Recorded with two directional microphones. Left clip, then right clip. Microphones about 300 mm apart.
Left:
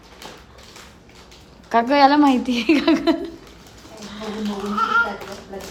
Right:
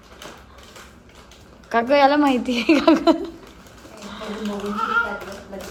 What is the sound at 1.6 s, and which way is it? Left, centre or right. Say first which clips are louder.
A woman's voice: left 1 dB; centre.